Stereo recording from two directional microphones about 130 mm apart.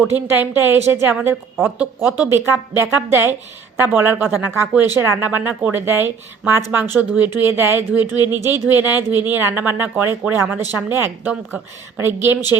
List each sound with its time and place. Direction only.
0.3 s speech: 15° right (ahead or behind)
2.3 s speech: 20° right (ahead or behind)